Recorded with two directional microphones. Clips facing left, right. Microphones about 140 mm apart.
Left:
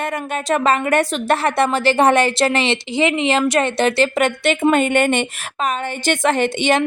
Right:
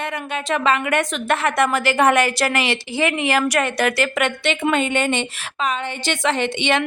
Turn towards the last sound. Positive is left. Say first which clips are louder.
# left 3 dB
turn(degrees=40)  # may be behind; listen again after turning